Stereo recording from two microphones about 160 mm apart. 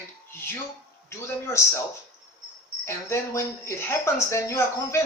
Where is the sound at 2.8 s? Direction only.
15° left (ahead or behind).